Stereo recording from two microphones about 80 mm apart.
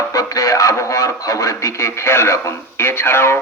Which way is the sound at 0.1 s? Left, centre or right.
Left.